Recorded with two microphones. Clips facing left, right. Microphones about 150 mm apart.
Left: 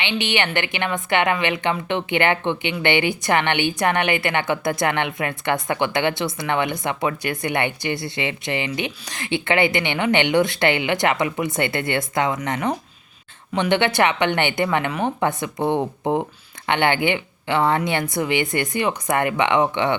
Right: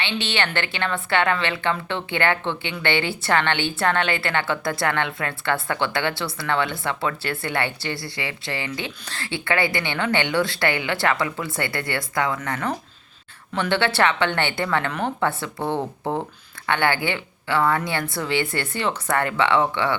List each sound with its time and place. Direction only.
0.0 s a woman's voice: 15° left (ahead or behind)